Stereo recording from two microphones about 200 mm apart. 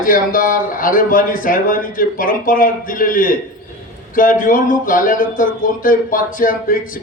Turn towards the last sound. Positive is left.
turn(degrees=45)  # may be behind; listen again after turning